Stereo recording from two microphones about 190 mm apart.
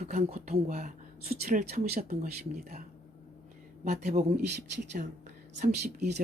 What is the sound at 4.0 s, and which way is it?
Speech, 45° right (ahead or behind).